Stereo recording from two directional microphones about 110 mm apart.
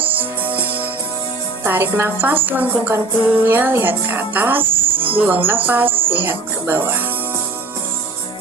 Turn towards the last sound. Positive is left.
turn(degrees=-20)  # may be behind; listen again after turning